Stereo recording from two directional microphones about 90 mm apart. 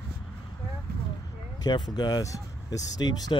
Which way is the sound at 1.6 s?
50° left (ahead or behind).